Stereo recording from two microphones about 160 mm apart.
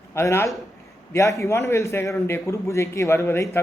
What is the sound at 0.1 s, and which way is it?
A man's voice, 20° left (ahead or behind).